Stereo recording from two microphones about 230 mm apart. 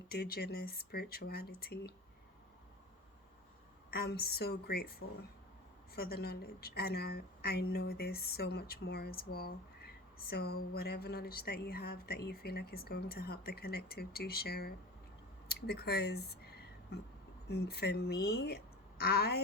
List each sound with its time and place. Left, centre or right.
0.1 s a woman's voice: left
3.9 s a woman's voice: left
15.4 s a sound: left
17.5 s a woman's voice: left